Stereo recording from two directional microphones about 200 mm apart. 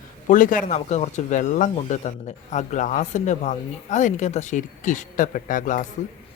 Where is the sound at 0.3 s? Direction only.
40° left (ahead or behind).